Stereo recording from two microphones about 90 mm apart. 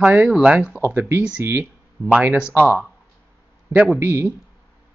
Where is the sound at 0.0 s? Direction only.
20° right (ahead or behind).